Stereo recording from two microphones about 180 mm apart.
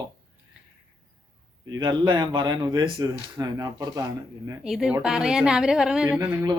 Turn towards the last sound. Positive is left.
turn(degrees=-10)  # may be behind; listen again after turning